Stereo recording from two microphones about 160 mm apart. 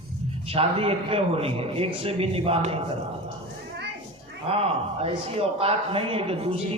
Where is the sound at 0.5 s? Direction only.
35° right (ahead or behind).